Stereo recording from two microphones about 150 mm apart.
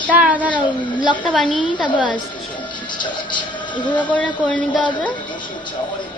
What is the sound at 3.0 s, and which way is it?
Music, 30° left (ahead or behind).